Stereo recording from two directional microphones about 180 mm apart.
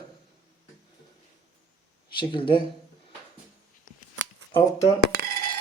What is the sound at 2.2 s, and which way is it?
Speech, 25° left (ahead or behind).